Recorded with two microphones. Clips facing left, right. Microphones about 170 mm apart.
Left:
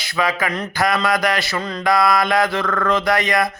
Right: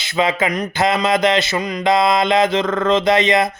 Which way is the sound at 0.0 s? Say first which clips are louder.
Right 3 dB; 25° right (ahead or behind).